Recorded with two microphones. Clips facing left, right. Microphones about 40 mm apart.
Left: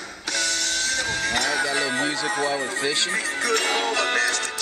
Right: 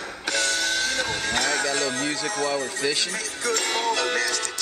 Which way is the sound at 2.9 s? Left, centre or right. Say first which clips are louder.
Left 4 dB; left.